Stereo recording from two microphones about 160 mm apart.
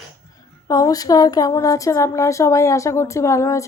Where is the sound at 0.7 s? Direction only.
20° left (ahead or behind).